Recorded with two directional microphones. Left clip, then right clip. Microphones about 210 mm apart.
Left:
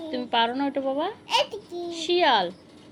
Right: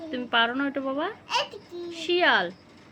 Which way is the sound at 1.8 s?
20° right (ahead or behind).